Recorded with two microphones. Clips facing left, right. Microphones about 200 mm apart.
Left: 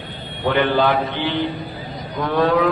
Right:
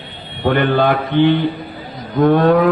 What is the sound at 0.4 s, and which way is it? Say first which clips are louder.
Mantra: right 3 dB; 50° right (ahead or behind).